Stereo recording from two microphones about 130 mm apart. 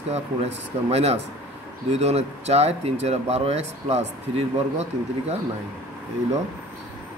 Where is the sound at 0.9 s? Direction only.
50° right (ahead or behind).